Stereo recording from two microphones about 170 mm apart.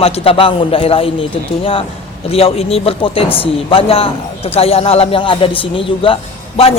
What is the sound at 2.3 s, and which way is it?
Speech, 35° left (ahead or behind).